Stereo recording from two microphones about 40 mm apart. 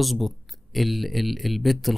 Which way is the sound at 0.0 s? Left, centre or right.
Centre.